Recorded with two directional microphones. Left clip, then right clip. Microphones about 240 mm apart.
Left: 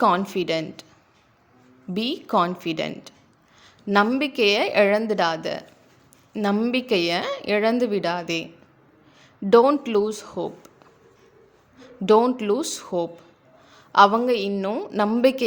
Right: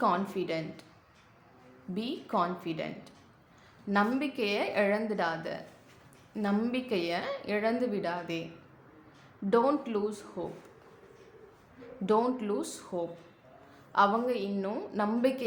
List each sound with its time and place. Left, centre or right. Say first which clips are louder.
0.0 s a woman's voice: left 9 dB; left
1.9 s a woman's voice: left 10 dB; left
9.5 s a woman's voice: left 11 dB; left
11.8 s a woman's voice: left 10 dB; left